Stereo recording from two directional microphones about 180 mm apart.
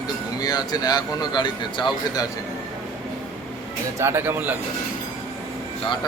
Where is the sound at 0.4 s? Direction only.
20° left (ahead or behind).